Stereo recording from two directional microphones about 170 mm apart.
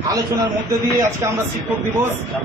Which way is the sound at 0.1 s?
20° right (ahead or behind).